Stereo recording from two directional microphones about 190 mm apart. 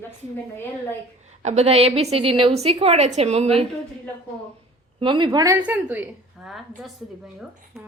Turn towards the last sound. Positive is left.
turn(degrees=0)  # may be behind; listen again after turning